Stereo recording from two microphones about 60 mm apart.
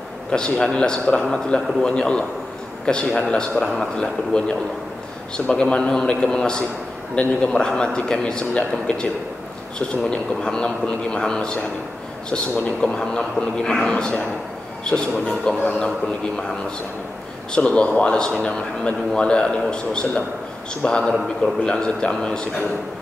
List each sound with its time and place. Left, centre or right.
0.3 s a man's voice: centre
12.6 s a man's voice: centre
17.5 s a man's voice: centre